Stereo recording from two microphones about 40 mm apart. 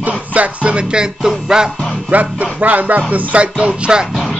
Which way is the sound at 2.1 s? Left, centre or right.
Right.